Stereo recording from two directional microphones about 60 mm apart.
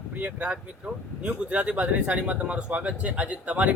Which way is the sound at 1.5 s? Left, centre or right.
Right.